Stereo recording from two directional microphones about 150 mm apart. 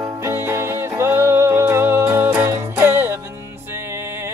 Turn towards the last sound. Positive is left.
turn(degrees=-15)  # may be behind; listen again after turning